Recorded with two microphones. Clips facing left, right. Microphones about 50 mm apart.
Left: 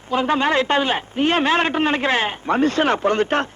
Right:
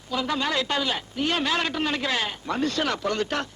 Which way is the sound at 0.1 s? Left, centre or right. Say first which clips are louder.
Left 8 dB; left.